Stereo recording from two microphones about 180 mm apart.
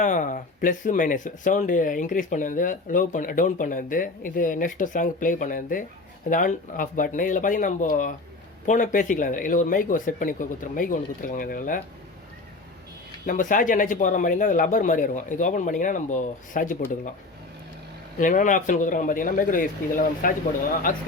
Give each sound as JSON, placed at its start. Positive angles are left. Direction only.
{"t": 0.0, "sound": "speech", "side_deg": 45}
{"t": 13.2, "sound": "speech", "side_deg": 45}
{"t": 18.2, "sound": "speech", "side_deg": 45}